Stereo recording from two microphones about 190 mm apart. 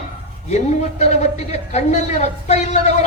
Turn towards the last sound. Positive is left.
turn(degrees=35)  # may be behind; listen again after turning